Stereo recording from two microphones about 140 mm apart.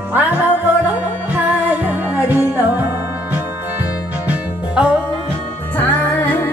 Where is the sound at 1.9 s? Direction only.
10° right (ahead or behind).